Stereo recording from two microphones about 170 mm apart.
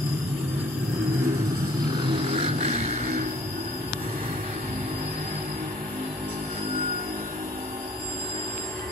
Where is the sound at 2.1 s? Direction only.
30° right (ahead or behind).